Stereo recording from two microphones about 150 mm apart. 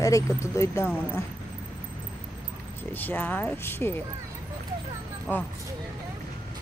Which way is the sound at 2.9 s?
15° left (ahead or behind).